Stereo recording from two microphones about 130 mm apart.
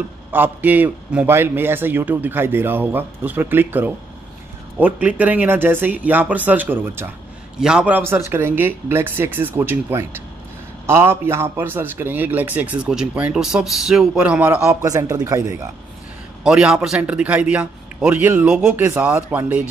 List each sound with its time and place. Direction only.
0.3 s a man's voice: 15° right (ahead or behind)
16.4 s a man's voice: 5° right (ahead or behind)